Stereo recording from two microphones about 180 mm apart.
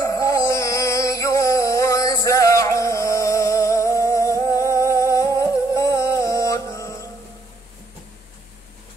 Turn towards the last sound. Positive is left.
turn(degrees=15)  # may be behind; listen again after turning